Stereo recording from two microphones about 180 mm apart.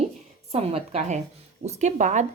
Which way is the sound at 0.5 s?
35° right (ahead or behind).